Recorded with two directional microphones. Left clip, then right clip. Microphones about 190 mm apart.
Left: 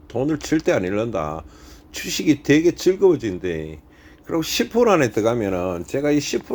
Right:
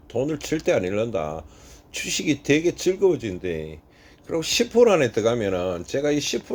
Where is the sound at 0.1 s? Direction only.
5° left (ahead or behind).